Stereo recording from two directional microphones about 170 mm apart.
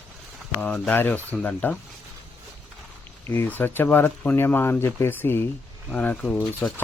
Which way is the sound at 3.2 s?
15° left (ahead or behind).